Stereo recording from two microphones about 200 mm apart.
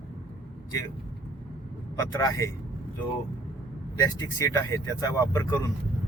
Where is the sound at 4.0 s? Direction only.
15° left (ahead or behind).